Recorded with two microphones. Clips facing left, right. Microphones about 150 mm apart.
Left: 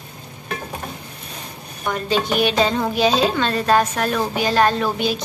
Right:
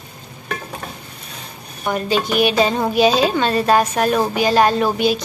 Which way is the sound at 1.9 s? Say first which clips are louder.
Right 2 dB; 10° right (ahead or behind).